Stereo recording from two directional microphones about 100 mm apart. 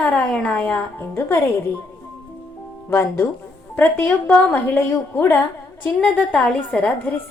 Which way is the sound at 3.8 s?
15° left (ahead or behind).